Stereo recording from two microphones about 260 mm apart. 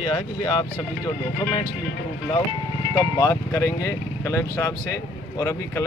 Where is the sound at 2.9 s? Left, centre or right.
Centre.